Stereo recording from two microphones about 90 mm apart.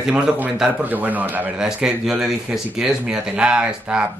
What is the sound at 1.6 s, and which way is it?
Speech, 5° right (ahead or behind).